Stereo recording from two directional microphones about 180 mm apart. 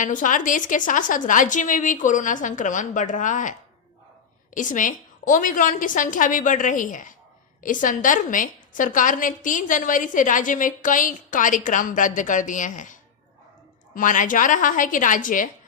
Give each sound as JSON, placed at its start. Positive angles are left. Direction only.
{"t": 0.0, "sound": "a woman's voice", "side_deg": 45}
{"t": 4.5, "sound": "a woman's voice", "side_deg": 45}